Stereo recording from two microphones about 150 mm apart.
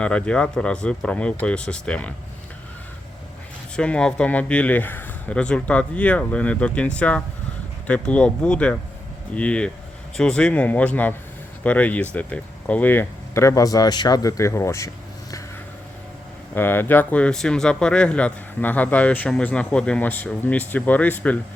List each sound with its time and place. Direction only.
0.0 s speech: 5° left (ahead or behind)
3.8 s speech: 5° left (ahead or behind)
16.6 s speech: 15° left (ahead or behind)